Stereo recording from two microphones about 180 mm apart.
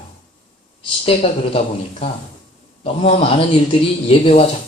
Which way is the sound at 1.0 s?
35° left (ahead or behind).